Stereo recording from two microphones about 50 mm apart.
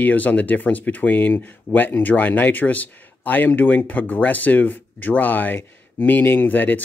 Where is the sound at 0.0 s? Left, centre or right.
Left.